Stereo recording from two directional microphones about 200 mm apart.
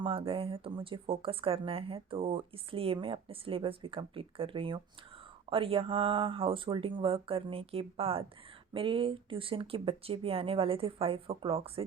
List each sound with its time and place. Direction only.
0.0 s speech: 25° right (ahead or behind)